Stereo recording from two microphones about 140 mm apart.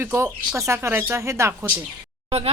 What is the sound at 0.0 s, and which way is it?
Speech, 15° right (ahead or behind).